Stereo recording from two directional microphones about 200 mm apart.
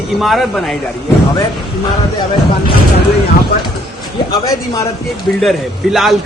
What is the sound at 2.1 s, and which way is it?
Speech, 25° left (ahead or behind).